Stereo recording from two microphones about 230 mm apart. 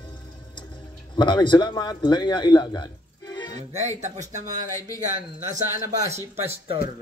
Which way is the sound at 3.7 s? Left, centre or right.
Right.